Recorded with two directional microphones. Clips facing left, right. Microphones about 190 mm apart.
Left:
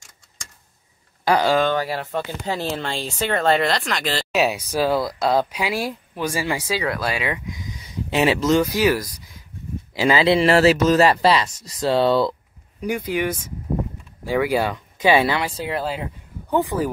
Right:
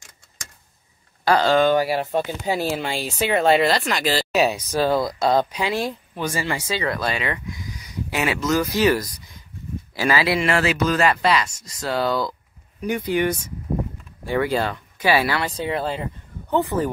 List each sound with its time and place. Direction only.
1.2 s speech: 10° left (ahead or behind)
1.6 s speech: 10° right (ahead or behind); by 8.5 s 30° left (ahead or behind)
8.7 s speech: 5° left (ahead or behind)
9.9 s speech: 20° left (ahead or behind)
11.5 s speech: centre (ahead or behind)
11.8 s speech: 30° left (ahead or behind)
12.8 s speech: 5° left (ahead or behind)
15.4 s speech: 5° left (ahead or behind)